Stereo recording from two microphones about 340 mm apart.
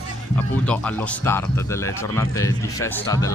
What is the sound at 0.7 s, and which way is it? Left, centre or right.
Speech, centre.